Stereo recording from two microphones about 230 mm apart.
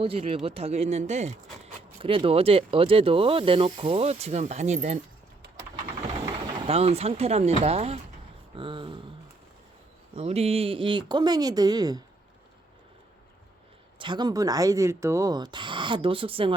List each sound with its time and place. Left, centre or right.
0.0 s speech: right
6.7 s speech: right
10.2 s speech: right
14.0 s speech: centre